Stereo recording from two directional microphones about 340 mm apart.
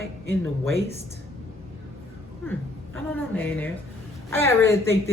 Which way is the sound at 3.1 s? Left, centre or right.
Centre.